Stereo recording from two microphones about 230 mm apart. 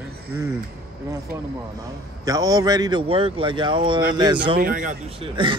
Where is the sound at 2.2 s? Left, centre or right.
Centre.